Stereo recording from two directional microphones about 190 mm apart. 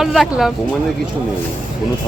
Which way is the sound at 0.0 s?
Centre (ahead or behind).